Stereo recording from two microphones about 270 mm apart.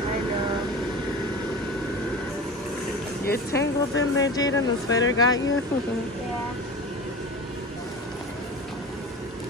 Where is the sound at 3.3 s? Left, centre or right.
Left.